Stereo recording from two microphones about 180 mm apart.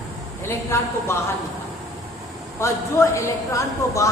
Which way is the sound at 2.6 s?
15° left (ahead or behind).